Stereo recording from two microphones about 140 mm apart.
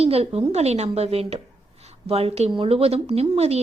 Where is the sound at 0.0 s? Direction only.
45° right (ahead or behind).